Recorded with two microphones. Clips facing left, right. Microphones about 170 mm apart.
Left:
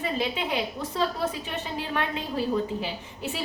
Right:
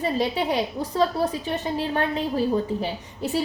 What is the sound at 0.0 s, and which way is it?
A woman's voice, 35° right (ahead or behind).